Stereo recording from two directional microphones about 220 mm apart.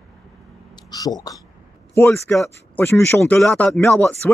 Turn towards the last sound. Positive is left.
turn(degrees=5)  # may be behind; listen again after turning